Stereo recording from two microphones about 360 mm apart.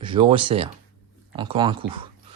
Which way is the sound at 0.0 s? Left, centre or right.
Centre.